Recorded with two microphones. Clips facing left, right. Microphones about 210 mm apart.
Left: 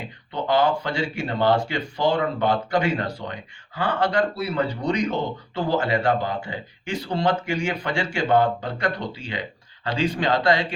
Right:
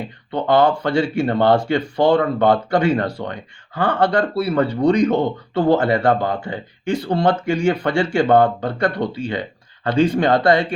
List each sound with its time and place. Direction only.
0.3 s speech: 60° right (ahead or behind)